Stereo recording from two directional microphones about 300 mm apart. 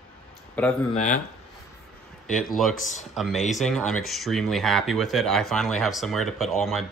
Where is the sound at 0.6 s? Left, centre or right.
Centre.